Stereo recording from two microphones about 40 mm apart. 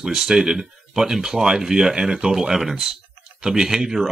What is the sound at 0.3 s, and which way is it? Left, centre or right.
Speech, centre.